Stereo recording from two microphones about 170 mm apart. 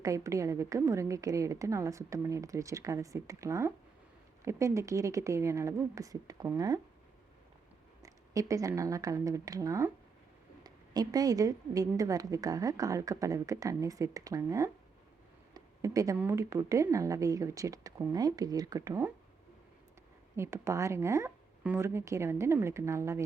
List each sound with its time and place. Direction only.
0.0 s a woman's voice: 20° right (ahead or behind)
8.0 s a woman's voice: 20° right (ahead or behind)
20.3 s a woman's voice: 15° right (ahead or behind)